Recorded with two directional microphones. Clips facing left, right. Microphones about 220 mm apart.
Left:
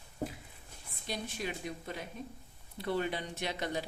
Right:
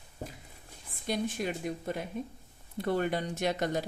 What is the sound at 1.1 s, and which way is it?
A woman's voice, 50° right (ahead or behind).